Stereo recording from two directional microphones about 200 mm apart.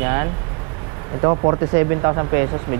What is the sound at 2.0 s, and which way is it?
Speech, 20° right (ahead or behind).